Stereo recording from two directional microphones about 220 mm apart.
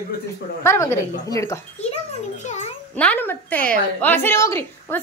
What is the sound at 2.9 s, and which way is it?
A woman's voice, 5° left (ahead or behind).